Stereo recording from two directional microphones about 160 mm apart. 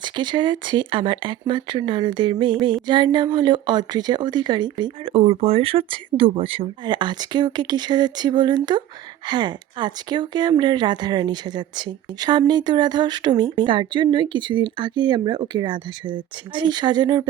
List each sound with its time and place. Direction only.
0.0 s a woman's voice: 30° right (ahead or behind)